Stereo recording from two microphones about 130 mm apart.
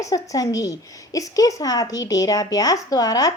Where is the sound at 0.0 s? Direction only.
25° left (ahead or behind).